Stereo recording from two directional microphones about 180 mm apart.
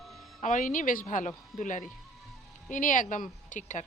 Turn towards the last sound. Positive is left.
turn(degrees=45)  # may be behind; listen again after turning